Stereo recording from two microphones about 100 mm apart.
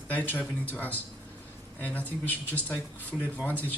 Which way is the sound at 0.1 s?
15° left (ahead or behind).